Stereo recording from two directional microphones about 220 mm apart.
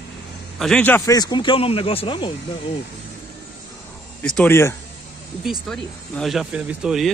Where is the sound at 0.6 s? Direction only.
5° left (ahead or behind); by 2.3 s 20° left (ahead or behind).